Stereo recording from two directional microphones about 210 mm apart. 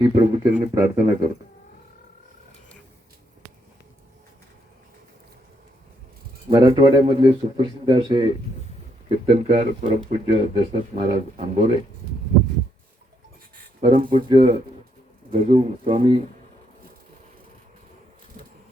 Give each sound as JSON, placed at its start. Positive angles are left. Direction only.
{"t": 0.0, "sound": "speech", "side_deg": -25}
{"t": 0.6, "sound": "speech", "side_deg": -15}
{"t": 6.5, "sound": "speech", "side_deg": -20}
{"t": 13.8, "sound": "speech", "side_deg": -25}